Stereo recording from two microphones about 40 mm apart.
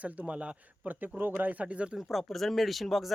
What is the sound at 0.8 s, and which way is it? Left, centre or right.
Speech, right.